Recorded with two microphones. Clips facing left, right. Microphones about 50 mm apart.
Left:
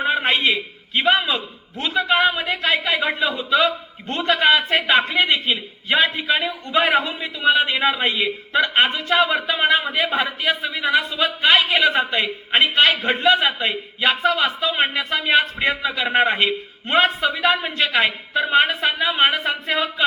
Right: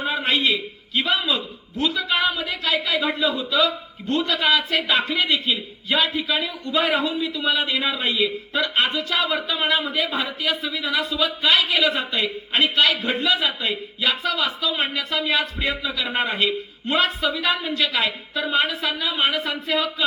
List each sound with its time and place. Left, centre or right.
0.0 s a man's voice: left